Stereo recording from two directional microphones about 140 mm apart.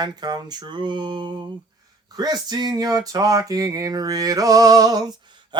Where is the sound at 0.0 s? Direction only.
30° right (ahead or behind).